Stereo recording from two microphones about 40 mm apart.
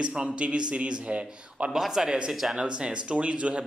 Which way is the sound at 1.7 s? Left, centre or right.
Centre.